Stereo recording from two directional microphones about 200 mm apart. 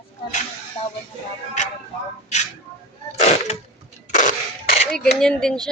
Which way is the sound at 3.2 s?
35° left (ahead or behind).